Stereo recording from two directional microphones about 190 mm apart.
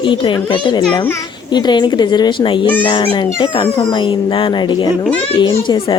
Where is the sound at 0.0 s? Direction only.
25° left (ahead or behind).